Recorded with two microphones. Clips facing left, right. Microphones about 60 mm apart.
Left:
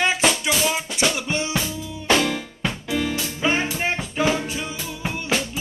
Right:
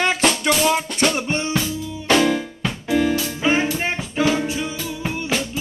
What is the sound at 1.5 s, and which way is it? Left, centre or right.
Music, centre.